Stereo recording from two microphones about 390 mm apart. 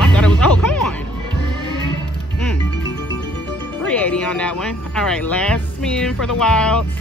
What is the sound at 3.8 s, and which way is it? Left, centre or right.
Speech, centre.